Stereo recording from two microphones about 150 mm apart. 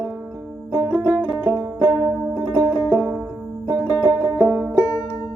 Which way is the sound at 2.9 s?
5° right (ahead or behind).